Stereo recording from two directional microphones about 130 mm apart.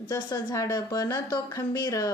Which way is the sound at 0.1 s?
35° left (ahead or behind).